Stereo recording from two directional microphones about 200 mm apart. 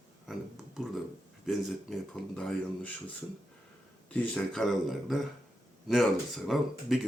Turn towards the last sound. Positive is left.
turn(degrees=0)  # may be behind; listen again after turning